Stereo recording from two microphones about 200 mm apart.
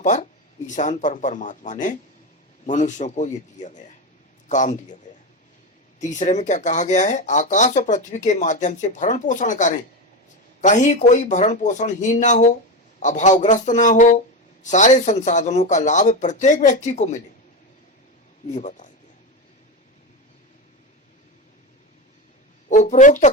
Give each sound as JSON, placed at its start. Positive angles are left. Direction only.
{"t": 0.0, "sound": "speech", "side_deg": 35}
{"t": 6.0, "sound": "speech", "side_deg": 35}
{"t": 18.5, "sound": "speech", "side_deg": 35}
{"t": 22.7, "sound": "speech", "side_deg": 40}